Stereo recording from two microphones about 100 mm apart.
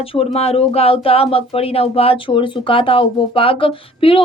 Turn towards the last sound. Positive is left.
turn(degrees=65)  # may be behind; listen again after turning